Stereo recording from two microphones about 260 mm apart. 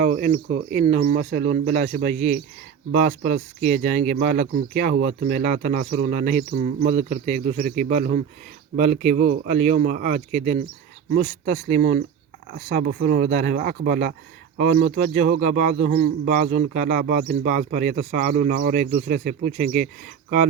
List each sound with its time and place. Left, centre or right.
0.0 s a man's voice: right